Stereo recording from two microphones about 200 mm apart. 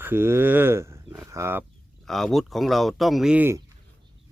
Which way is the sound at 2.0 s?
Centre (ahead or behind).